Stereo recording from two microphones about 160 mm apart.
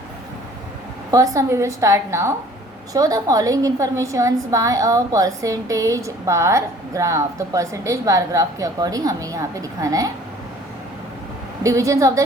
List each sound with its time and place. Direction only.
1.1 s a woman's voice: 20° right (ahead or behind)
11.6 s a woman's voice: 20° right (ahead or behind)